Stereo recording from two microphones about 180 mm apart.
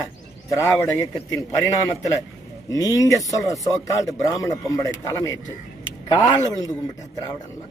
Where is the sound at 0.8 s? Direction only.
15° left (ahead or behind).